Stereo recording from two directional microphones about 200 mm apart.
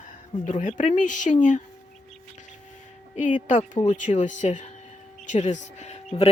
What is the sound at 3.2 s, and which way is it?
Speech, 40° left (ahead or behind).